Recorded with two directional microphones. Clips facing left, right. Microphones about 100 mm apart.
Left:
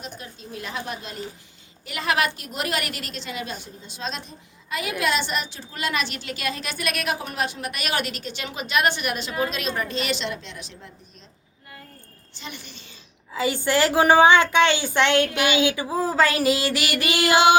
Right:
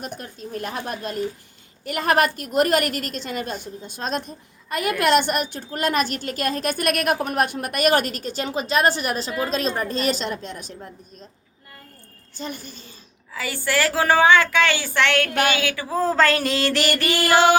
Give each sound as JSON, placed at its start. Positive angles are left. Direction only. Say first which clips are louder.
{"t": 0.0, "sound": "a woman's voice", "louder": "right 5 dB", "side_deg": -50}
{"t": 12.3, "sound": "a woman's voice", "louder": "right 6 dB", "side_deg": -40}
{"t": 13.3, "sound": "a woman's voice", "louder": "left 2 dB", "side_deg": 20}
{"t": 15.5, "sound": "a sound", "louder": "left 2 dB", "side_deg": 20}